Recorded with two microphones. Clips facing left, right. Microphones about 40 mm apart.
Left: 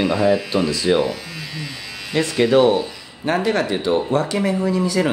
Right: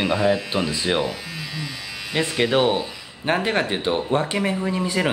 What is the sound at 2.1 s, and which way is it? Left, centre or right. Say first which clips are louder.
Speech: left 5 dB; centre.